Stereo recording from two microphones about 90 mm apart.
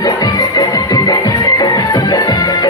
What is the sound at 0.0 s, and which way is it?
Music, 45° left (ahead or behind).